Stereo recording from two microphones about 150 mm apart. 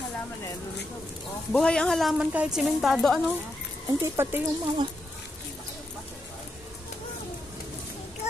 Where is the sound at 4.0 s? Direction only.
15° right (ahead or behind).